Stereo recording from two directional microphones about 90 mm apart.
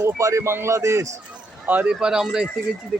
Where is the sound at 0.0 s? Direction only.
35° right (ahead or behind).